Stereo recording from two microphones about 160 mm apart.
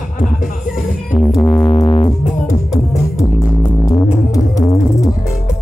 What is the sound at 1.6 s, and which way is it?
Music, 40° left (ahead or behind).